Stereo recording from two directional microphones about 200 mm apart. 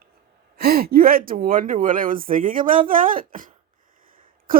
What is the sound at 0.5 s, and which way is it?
Speech, 50° right (ahead or behind).